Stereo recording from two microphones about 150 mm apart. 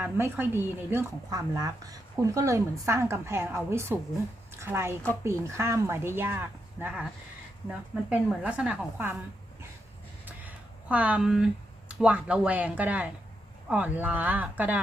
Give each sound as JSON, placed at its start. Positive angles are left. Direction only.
{"t": 0.0, "sound": "a woman's voice", "side_deg": -15}
{"t": 10.2, "sound": "a sound", "side_deg": -10}
{"t": 11.9, "sound": "a woman's voice", "side_deg": -10}